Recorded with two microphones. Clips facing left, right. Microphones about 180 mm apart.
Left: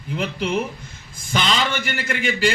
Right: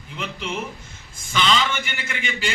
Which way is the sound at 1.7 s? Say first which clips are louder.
Left 4 dB; 40° left (ahead or behind).